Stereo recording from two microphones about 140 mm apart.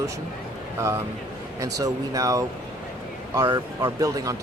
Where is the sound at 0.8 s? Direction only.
20° right (ahead or behind).